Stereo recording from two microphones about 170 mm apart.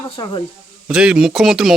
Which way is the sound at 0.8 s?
5° right (ahead or behind).